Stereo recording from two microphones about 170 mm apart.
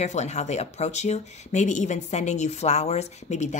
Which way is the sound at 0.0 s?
45° left (ahead or behind).